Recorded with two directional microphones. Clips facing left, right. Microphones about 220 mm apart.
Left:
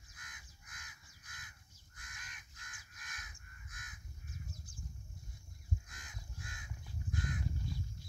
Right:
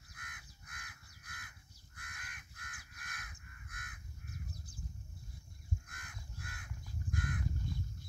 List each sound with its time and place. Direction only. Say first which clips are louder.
0.1 s crow: right 3 dB; 60° right (ahead or behind)
5.9 s crow: right 1 dB; 60° right (ahead or behind)